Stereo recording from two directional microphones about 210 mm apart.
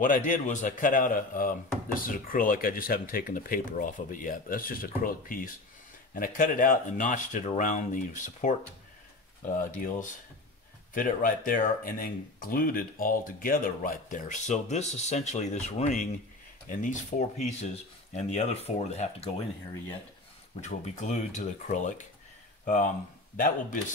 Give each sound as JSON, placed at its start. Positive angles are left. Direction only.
{"t": 0.0, "sound": "speech", "side_deg": 40}
{"t": 9.8, "sound": "speech", "side_deg": 40}
{"t": 20.6, "sound": "speech", "side_deg": 35}